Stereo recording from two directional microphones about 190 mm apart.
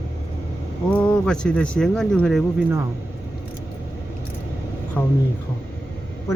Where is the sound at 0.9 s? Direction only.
5° left (ahead or behind).